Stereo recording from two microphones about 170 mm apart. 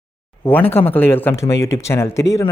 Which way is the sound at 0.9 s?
10° left (ahead or behind).